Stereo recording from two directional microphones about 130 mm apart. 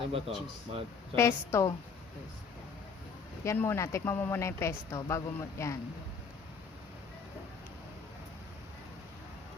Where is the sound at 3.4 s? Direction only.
20° left (ahead or behind).